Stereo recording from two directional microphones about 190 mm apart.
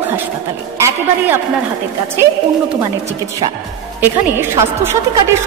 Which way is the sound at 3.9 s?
10° right (ahead or behind).